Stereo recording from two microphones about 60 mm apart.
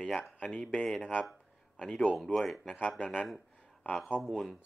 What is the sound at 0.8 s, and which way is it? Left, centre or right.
Speech, centre.